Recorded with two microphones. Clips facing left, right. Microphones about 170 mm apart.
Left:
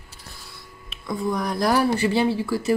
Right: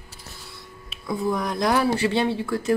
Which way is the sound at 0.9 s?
5° right (ahead or behind).